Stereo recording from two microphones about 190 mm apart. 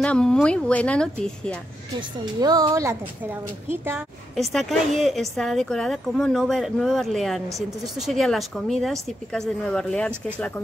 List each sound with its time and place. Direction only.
0.0 s speech: 5° left (ahead or behind)
2.0 s a woman's voice: 20° right (ahead or behind)
4.4 s speech: centre (ahead or behind)